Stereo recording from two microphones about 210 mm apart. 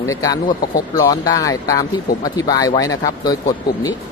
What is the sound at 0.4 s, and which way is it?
Speech, 45° left (ahead or behind).